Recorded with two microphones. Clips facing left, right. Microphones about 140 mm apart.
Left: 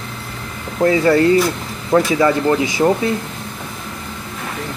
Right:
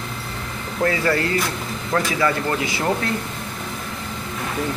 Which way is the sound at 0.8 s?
20° left (ahead or behind).